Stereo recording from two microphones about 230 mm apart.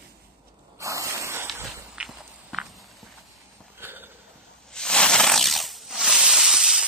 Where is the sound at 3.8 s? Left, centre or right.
Centre.